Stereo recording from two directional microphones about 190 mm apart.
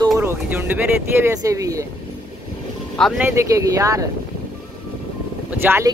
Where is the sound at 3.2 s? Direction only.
15° right (ahead or behind).